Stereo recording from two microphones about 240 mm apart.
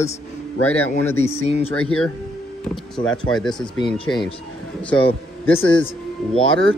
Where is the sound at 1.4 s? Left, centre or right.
Left.